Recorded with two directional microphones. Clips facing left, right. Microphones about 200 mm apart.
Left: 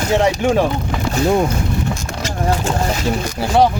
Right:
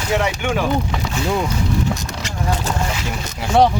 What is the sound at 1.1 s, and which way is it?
Speech, 45° left (ahead or behind).